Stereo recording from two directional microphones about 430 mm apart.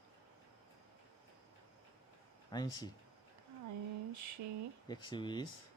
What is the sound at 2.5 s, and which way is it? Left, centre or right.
Speech, centre.